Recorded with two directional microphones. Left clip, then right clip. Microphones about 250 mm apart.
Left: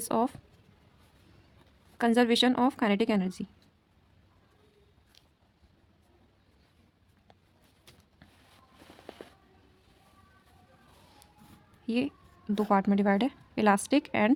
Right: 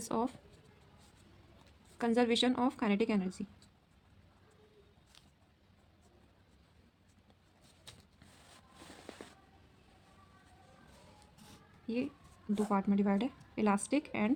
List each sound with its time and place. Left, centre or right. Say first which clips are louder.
0.0 s a woman's voice: left 7 dB; left
2.0 s a woman's voice: left 6 dB; left
11.9 s a woman's voice: left 7 dB; left